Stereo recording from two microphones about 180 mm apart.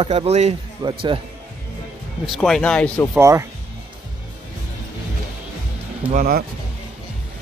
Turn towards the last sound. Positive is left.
turn(degrees=-50)  # may be behind; listen again after turning